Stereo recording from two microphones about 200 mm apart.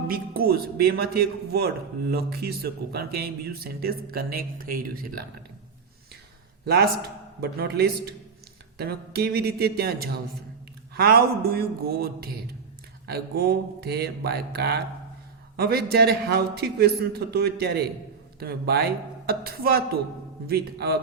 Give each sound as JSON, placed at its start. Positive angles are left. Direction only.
{"t": 0.1, "sound": "a man's voice", "side_deg": -50}
{"t": 7.4, "sound": "a man's voice", "side_deg": -55}
{"t": 13.1, "sound": "a man's voice", "side_deg": -50}